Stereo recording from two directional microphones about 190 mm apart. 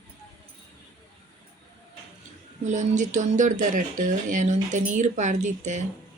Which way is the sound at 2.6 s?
40° right (ahead or behind).